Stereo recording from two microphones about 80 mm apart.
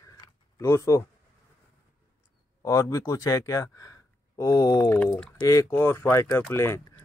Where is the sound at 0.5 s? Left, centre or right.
Left.